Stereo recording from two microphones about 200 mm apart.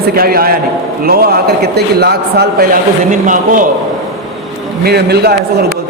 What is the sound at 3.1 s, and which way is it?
Speech, 40° right (ahead or behind).